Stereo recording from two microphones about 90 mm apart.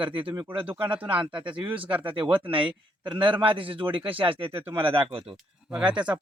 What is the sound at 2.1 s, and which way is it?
Speech, 70° right (ahead or behind).